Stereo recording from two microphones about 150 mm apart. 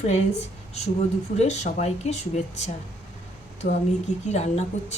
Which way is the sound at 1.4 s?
50° left (ahead or behind).